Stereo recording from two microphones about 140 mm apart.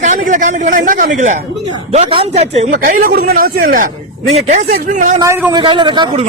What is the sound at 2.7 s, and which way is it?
Speech, 75° right (ahead or behind).